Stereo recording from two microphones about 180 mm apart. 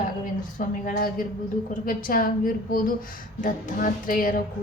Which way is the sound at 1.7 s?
50° left (ahead or behind).